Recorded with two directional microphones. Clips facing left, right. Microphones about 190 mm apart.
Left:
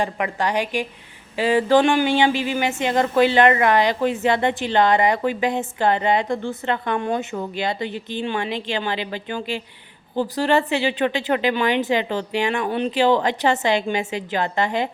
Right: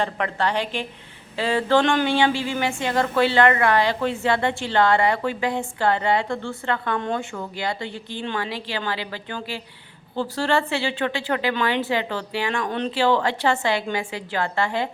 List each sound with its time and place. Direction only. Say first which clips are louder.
0.0 s a woman's voice: left 1 dB; 15° left (ahead or behind)